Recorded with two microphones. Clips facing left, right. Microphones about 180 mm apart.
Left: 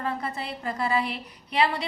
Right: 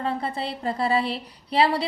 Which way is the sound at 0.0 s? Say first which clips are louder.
Right 3 dB; 30° right (ahead or behind).